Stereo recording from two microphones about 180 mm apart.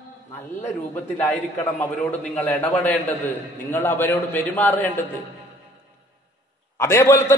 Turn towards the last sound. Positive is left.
turn(degrees=15)  # may be behind; listen again after turning